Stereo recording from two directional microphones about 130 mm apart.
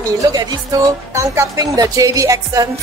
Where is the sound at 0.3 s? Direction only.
30° right (ahead or behind).